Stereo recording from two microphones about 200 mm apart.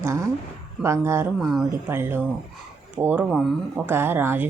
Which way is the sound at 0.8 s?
15° right (ahead or behind).